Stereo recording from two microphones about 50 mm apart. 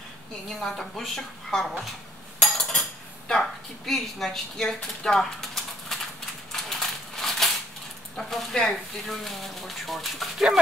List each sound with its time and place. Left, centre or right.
0.5 s speech: centre
2.6 s cutlery: centre
3.3 s a woman's voice: centre
5.0 s pigeon: centre
6.5 s crushing: centre
8.2 s speech: centre